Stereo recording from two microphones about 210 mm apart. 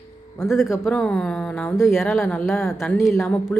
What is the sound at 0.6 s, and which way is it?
Speech, 15° left (ahead or behind).